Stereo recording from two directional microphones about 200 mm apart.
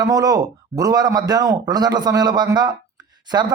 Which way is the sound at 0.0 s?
20° right (ahead or behind).